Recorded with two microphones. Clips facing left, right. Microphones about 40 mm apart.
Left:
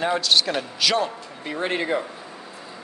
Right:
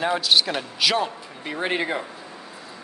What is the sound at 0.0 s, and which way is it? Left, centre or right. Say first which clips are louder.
A man's voice: even; centre.